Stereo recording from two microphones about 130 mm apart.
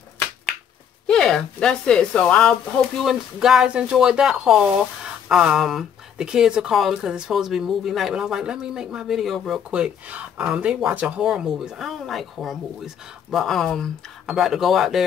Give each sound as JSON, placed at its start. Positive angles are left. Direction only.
{"t": 1.0, "sound": "speech", "side_deg": 5}
{"t": 3.0, "sound": "speech", "side_deg": 0}